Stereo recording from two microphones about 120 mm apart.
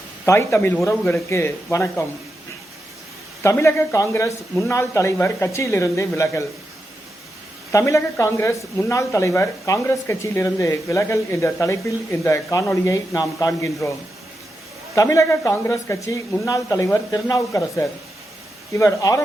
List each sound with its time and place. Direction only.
0.3 s speech: 20° left (ahead or behind)
3.4 s speech: 25° left (ahead or behind)
7.7 s speech: 25° left (ahead or behind)
14.9 s speech: 25° left (ahead or behind)